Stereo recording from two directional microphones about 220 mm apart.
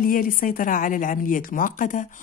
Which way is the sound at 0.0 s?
40° left (ahead or behind).